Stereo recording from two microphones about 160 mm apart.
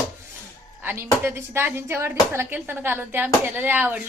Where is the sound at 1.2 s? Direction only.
15° right (ahead or behind).